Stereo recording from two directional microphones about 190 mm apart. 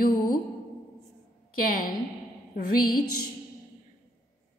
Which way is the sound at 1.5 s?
50° left (ahead or behind).